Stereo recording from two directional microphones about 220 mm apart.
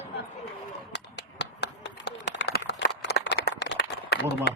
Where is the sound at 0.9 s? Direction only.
50° left (ahead or behind).